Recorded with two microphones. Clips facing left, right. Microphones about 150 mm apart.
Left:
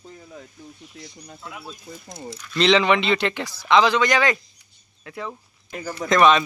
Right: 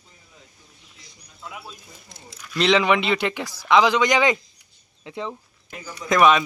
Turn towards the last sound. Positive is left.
turn(degrees=-5)  # may be behind; listen again after turning